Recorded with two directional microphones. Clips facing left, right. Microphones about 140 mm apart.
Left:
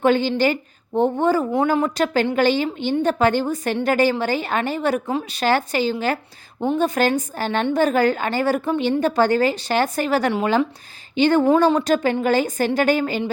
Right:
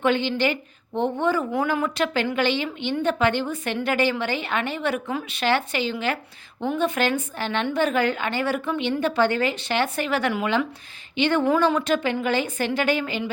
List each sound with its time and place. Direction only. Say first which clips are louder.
0.0 s a woman's voice: left 4 dB; 40° left (ahead or behind)